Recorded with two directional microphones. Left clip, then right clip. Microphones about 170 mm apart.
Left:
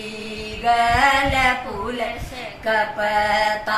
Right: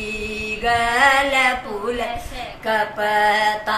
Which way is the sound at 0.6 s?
20° right (ahead or behind).